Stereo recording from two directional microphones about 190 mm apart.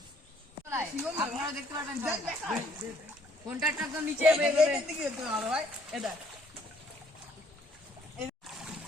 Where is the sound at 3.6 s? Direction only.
5° right (ahead or behind).